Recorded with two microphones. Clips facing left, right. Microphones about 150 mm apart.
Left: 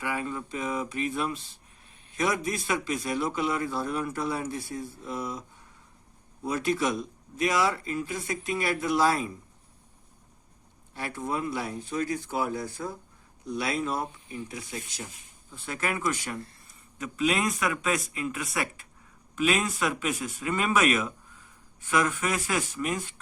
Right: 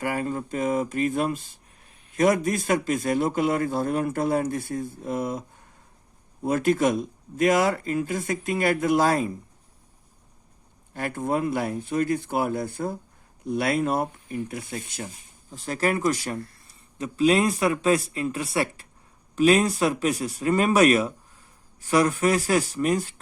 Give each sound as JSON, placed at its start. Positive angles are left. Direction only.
{"t": 0.0, "sound": "a man's voice", "side_deg": -45}
{"t": 10.9, "sound": "speech", "side_deg": -50}
{"t": 15.5, "sound": "speech", "side_deg": -35}